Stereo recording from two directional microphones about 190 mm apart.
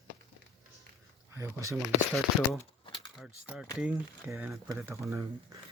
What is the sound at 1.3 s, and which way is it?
Speech, 15° right (ahead or behind).